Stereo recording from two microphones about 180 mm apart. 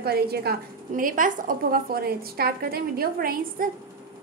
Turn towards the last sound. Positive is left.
turn(degrees=-55)  # may be behind; listen again after turning